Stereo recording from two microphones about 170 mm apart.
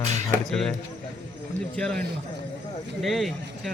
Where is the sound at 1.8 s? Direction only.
5° left (ahead or behind).